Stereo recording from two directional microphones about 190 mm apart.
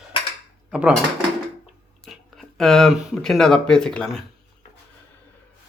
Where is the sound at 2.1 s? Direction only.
Centre (ahead or behind).